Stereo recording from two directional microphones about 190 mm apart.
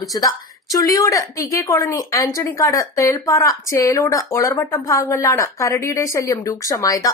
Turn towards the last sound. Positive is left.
turn(degrees=20)  # may be behind; listen again after turning